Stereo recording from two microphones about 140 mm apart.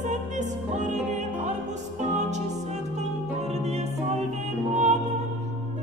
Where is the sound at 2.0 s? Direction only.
55° right (ahead or behind).